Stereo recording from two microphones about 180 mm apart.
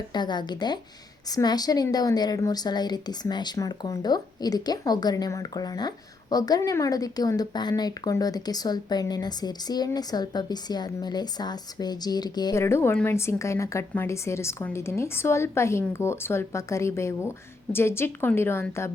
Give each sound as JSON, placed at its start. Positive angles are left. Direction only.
{"t": 0.1, "sound": "a woman's voice", "side_deg": 25}